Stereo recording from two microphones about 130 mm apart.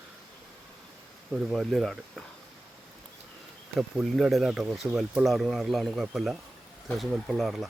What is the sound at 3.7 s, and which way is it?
Speech, centre (ahead or behind).